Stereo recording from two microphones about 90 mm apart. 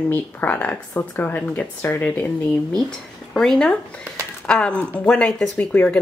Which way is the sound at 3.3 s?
5° left (ahead or behind).